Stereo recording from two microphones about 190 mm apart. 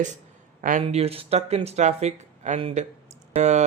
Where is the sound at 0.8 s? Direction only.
35° right (ahead or behind).